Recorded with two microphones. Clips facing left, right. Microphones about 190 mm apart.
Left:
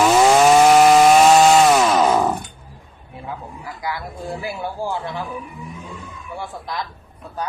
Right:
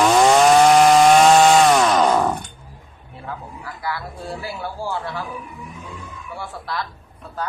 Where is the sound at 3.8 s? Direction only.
15° left (ahead or behind).